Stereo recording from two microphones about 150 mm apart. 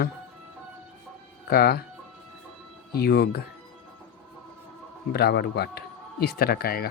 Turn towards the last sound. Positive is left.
turn(degrees=85)